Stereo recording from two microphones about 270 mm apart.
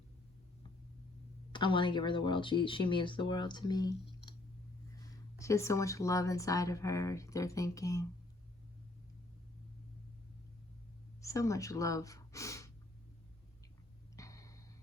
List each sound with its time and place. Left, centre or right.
1.5 s speech: centre
5.4 s speech: centre
11.2 s speech: centre
14.2 s a sound: centre